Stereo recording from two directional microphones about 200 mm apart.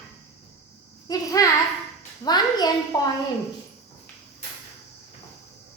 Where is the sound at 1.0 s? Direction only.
15° left (ahead or behind).